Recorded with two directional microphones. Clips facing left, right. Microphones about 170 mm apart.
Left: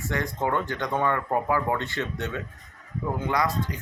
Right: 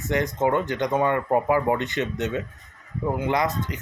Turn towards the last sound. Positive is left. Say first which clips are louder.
# right 2 dB
turn(degrees=-20)  # may be behind; listen again after turning